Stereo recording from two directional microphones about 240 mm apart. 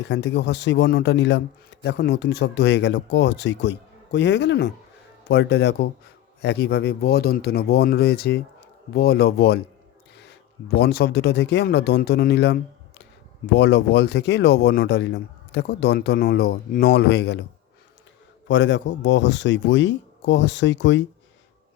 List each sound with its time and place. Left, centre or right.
0.1 s speech: left
18.4 s speech: left